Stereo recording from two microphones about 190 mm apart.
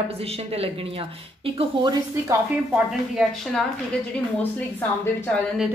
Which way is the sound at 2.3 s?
5° right (ahead or behind).